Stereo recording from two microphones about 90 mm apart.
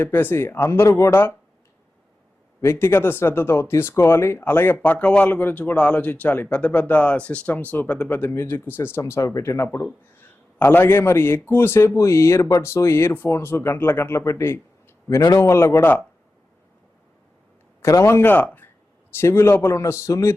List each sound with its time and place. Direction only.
0.0 s speech: 25° left (ahead or behind)
0.9 s a man's voice: 40° left (ahead or behind)
2.6 s a man's voice: 30° left (ahead or behind)
17.8 s a man's voice: 30° left (ahead or behind)